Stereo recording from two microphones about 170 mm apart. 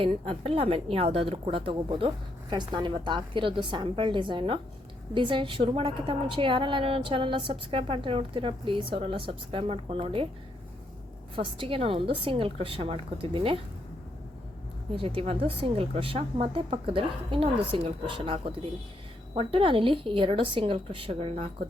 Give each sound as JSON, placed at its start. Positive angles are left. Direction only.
{"t": 0.0, "sound": "a woman's voice", "side_deg": -35}
{"t": 11.3, "sound": "a woman's voice", "side_deg": -30}
{"t": 14.9, "sound": "a woman's voice", "side_deg": -30}